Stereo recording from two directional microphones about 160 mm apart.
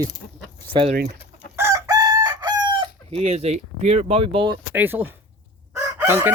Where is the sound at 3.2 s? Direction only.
40° right (ahead or behind).